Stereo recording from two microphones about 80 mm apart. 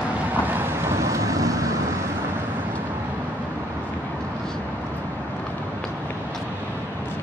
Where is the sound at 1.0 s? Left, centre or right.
Right.